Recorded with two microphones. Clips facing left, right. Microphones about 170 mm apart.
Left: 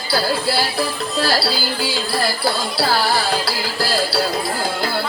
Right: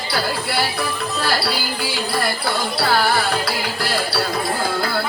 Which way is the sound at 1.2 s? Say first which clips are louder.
Left 3 dB; 30° left (ahead or behind).